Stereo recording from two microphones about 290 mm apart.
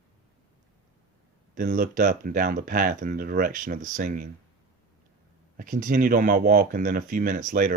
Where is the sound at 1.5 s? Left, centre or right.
Right.